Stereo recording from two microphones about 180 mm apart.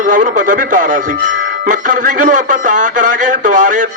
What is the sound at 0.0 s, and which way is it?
Speech, 45° right (ahead or behind).